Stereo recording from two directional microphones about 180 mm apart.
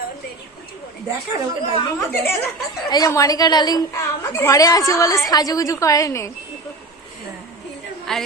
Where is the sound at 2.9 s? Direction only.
20° left (ahead or behind).